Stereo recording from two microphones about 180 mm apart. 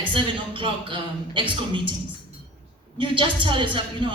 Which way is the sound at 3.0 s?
25° right (ahead or behind).